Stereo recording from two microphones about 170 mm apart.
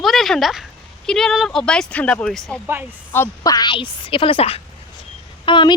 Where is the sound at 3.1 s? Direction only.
15° left (ahead or behind).